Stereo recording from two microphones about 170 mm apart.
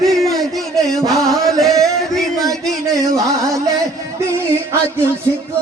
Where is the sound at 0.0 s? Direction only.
Centre (ahead or behind).